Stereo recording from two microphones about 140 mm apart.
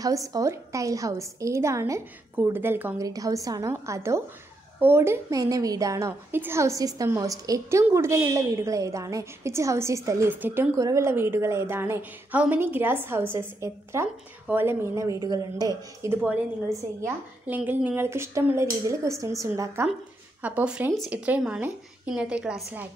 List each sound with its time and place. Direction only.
0.0 s a woman's voice: 25° right (ahead or behind)
3.0 s a woman's voice: 25° right (ahead or behind)
20.4 s a woman's voice: 10° right (ahead or behind)